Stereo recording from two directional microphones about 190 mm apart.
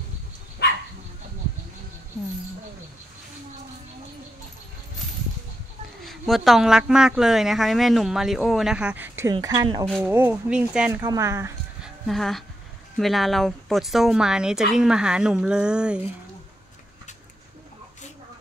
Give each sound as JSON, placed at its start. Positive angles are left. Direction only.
{"t": 6.0, "sound": "speech", "side_deg": 0}
{"t": 11.0, "sound": "speech", "side_deg": -15}
{"t": 11.8, "sound": "a sound", "side_deg": 0}
{"t": 13.0, "sound": "speech", "side_deg": 0}